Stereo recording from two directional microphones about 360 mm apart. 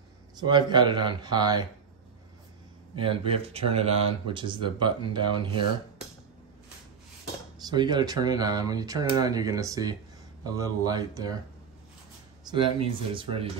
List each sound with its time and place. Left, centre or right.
0.4 s speech: centre
3.0 s speech: centre
7.6 s speech: centre
12.4 s speech: centre